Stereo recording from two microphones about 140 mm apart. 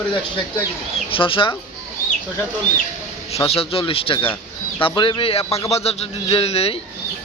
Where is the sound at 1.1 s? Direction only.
40° left (ahead or behind).